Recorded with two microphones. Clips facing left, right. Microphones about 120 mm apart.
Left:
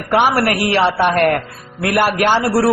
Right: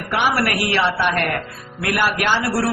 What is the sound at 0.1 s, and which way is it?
A man's voice, 45° left (ahead or behind).